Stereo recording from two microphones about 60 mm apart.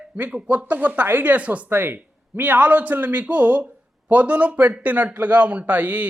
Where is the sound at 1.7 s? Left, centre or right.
Right.